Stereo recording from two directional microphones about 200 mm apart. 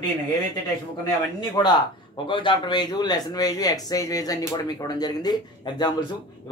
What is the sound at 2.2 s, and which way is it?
Speech, 25° left (ahead or behind).